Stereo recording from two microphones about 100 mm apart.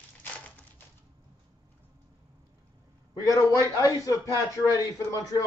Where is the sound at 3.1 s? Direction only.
35° left (ahead or behind).